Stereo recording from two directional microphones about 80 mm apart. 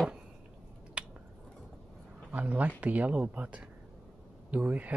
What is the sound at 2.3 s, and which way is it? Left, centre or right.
Speech, centre.